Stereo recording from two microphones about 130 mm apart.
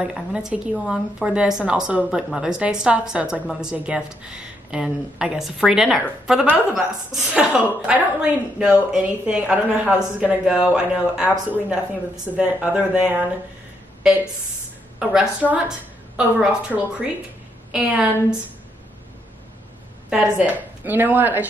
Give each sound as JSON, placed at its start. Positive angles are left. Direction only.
{"t": 0.0, "sound": "a woman's voice", "side_deg": -5}
{"t": 15.0, "sound": "a woman's voice", "side_deg": -10}
{"t": 20.1, "sound": "a woman's voice", "side_deg": -10}